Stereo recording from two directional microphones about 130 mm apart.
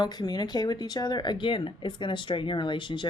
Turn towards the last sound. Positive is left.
turn(degrees=35)  # may be behind; listen again after turning